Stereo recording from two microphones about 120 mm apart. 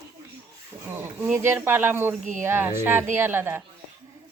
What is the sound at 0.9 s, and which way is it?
A woman's voice, 20° right (ahead or behind).